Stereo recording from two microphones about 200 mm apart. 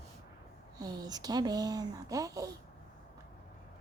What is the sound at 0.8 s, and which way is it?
Speech, 20° right (ahead or behind).